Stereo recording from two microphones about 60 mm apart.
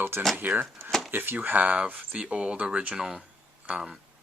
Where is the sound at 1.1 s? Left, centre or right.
Right; by 3.2 s centre.